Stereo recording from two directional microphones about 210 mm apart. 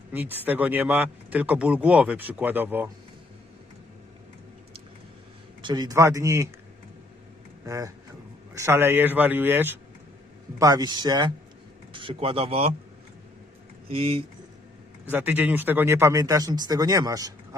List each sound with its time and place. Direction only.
0.1 s speech: 10° right (ahead or behind)
5.6 s speech: 20° right (ahead or behind)
7.6 s speech: 15° right (ahead or behind)
13.8 s speech: 25° right (ahead or behind)
15.0 s speech: 10° right (ahead or behind)